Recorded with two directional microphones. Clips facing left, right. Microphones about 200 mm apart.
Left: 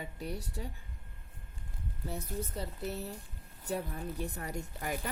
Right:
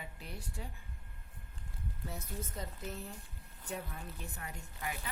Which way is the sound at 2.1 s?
35° left (ahead or behind).